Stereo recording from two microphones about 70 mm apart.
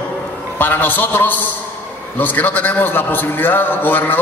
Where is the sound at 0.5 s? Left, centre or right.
Left.